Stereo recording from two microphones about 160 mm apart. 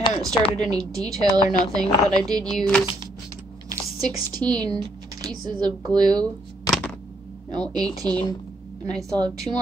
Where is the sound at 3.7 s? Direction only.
25° right (ahead or behind).